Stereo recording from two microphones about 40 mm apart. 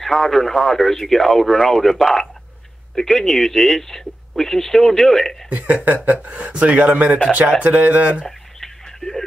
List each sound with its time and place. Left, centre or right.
0.0 s speech: centre
5.5 s speech: right
8.3 s a sound: centre